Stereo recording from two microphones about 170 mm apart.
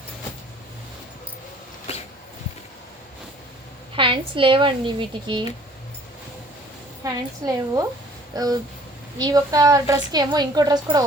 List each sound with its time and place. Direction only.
3.9 s speech: 30° right (ahead or behind)
7.0 s speech: 20° right (ahead or behind)